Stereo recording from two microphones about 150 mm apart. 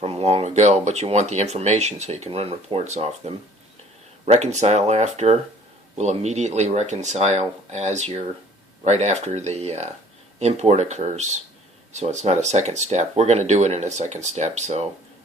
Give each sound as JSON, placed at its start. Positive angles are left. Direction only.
{"t": 0.0, "sound": "speech", "side_deg": -40}